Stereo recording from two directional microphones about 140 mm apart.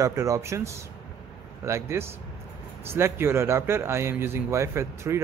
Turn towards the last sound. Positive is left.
turn(degrees=-20)  # may be behind; listen again after turning